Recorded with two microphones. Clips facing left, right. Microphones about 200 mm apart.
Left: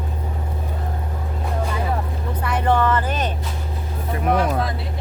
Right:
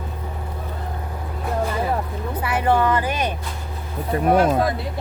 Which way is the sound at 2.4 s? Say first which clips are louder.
Even; 10° right (ahead or behind).